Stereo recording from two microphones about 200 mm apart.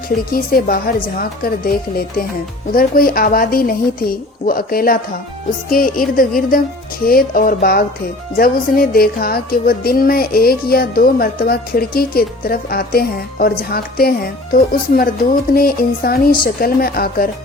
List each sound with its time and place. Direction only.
0.3 s speech: 45° left (ahead or behind)